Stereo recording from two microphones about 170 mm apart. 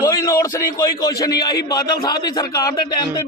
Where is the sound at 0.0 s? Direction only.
20° left (ahead or behind).